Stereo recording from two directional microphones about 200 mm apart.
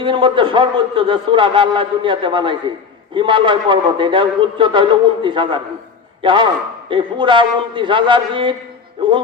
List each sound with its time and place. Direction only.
0.0 s a man's voice: 25° right (ahead or behind)